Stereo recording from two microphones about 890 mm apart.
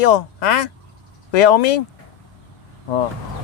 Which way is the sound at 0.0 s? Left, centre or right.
Left.